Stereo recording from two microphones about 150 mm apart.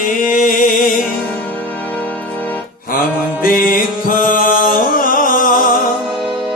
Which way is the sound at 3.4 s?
70° left (ahead or behind).